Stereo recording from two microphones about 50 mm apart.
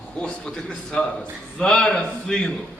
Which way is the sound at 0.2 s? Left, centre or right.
Centre.